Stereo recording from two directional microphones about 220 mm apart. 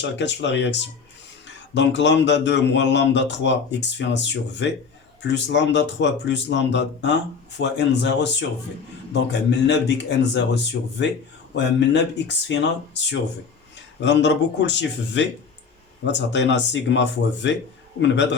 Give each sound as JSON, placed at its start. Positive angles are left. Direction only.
{"t": 0.0, "sound": "speech", "side_deg": 55}
{"t": 14.0, "sound": "speech", "side_deg": 55}
{"t": 18.0, "sound": "speech", "side_deg": 55}